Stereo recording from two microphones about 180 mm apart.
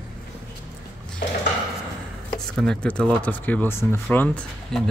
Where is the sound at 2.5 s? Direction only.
5° left (ahead or behind).